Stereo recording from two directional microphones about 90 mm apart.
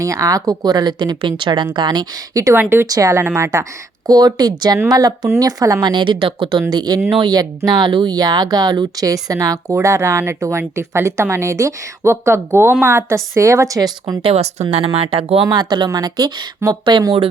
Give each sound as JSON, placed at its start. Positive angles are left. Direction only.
{"t": 0.0, "sound": "speech", "side_deg": -40}
{"t": 2.3, "sound": "speech", "side_deg": -40}
{"t": 2.6, "sound": "a woman's voice", "side_deg": -25}
{"t": 2.8, "sound": "speech", "side_deg": -40}
{"t": 5.9, "sound": "speech", "side_deg": -60}
{"t": 6.7, "sound": "a woman's voice", "side_deg": -50}
{"t": 14.9, "sound": "speech", "side_deg": -90}
{"t": 15.4, "sound": "speech", "side_deg": -55}